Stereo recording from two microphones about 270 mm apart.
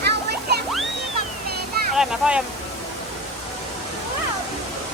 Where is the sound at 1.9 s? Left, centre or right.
Centre.